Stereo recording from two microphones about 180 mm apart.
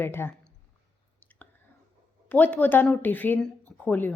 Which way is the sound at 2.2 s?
10° left (ahead or behind).